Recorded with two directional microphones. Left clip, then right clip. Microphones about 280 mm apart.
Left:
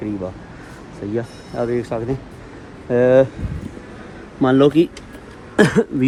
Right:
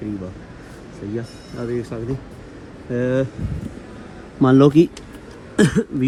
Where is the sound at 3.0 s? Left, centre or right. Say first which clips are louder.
Left 9 dB; centre.